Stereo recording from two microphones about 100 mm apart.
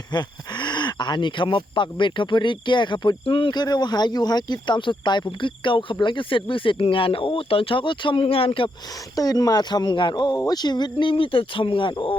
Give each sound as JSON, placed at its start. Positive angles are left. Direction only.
{"t": 0.1, "sound": "speech", "side_deg": 45}
{"t": 9.1, "sound": "speech", "side_deg": 40}